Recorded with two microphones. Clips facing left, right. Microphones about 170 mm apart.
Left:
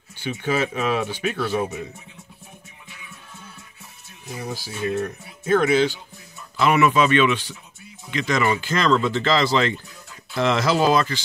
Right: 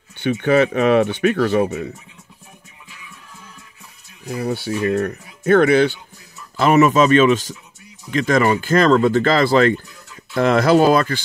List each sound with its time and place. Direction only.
0.2 s speech: 60° right (ahead or behind)
4.4 s speech: 65° right (ahead or behind)
6.5 s speech: 40° right (ahead or behind)